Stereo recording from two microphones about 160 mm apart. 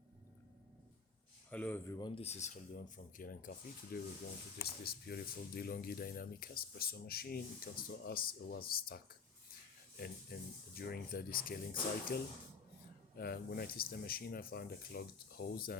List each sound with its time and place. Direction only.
1.5 s speech: 10° left (ahead or behind)
2.0 s speech: 30° left (ahead or behind); by 4.0 s 65° left (ahead or behind)
4.5 s speech: 80° left
10.3 s speech: 70° left (ahead or behind)
13.1 s speech: 75° left (ahead or behind)